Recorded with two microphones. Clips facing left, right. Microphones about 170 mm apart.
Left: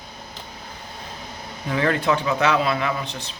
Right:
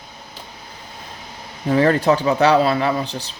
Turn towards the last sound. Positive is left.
turn(degrees=-35)  # may be behind; listen again after turning